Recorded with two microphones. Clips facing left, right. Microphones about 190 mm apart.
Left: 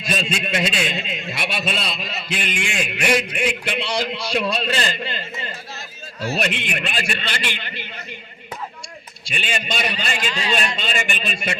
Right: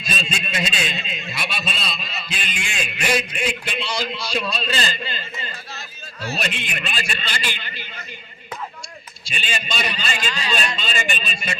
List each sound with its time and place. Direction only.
0.0 s a man's voice: 65° left (ahead or behind)
6.4 s a man's voice: 65° left (ahead or behind)
9.2 s a man's voice: 60° left (ahead or behind)